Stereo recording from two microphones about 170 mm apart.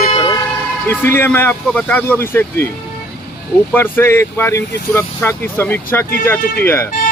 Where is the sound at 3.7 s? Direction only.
15° left (ahead or behind).